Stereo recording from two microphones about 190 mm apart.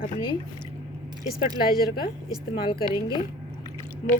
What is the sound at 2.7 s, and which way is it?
Speech, 25° left (ahead or behind).